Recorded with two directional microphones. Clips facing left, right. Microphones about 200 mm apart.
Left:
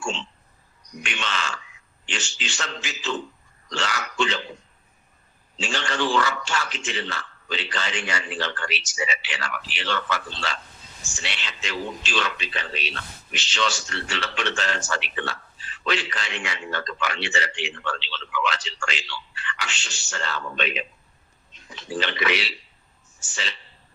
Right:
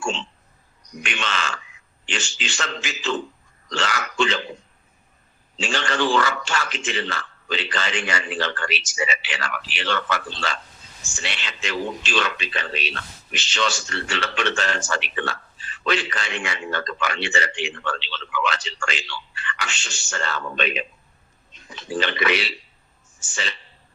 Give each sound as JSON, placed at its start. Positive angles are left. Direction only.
{"t": 1.0, "sound": "speech", "side_deg": -90}
{"t": 5.5, "sound": "a man's voice", "side_deg": -90}
{"t": 13.3, "sound": "a man's voice", "side_deg": -50}
{"t": 21.9, "sound": "a man's voice", "side_deg": -50}